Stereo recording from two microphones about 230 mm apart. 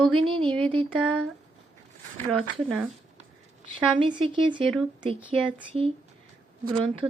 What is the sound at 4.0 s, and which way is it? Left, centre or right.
Speech, right.